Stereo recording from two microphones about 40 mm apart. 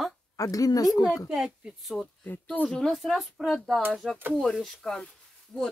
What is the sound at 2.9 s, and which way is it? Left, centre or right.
Speech, centre.